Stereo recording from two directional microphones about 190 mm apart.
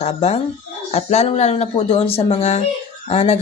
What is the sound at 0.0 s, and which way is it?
Speech, 35° left (ahead or behind).